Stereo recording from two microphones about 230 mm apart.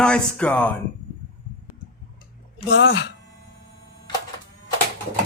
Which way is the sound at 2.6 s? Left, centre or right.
Left.